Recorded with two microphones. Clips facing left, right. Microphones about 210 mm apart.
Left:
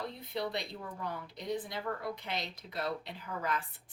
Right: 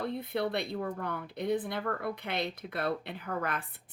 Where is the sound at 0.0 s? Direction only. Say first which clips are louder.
Right 5 dB; 55° right (ahead or behind).